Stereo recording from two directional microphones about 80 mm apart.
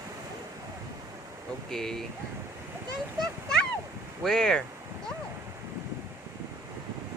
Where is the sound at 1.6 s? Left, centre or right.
Centre.